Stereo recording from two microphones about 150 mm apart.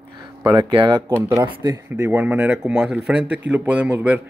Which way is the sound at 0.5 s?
30° right (ahead or behind).